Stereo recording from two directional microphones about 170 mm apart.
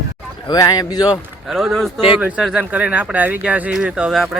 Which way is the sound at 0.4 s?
25° left (ahead or behind).